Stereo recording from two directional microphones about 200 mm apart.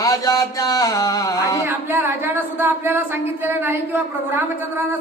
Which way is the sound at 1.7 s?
10° right (ahead or behind).